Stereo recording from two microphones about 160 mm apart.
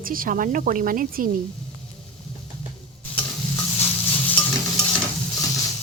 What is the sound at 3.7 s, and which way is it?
Stir, 15° left (ahead or behind).